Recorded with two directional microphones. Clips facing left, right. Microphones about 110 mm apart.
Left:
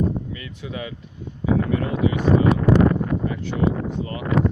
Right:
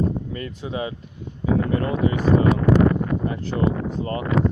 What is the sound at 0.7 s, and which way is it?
Speech, 30° right (ahead or behind).